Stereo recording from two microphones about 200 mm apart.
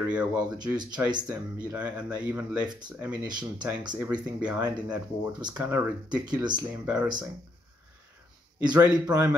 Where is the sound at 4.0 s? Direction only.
5° right (ahead or behind).